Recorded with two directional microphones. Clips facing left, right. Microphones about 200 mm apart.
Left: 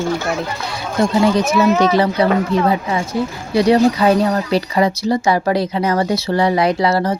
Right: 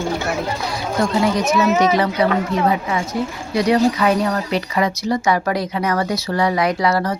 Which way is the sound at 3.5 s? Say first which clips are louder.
Left 3 dB; 30° left (ahead or behind).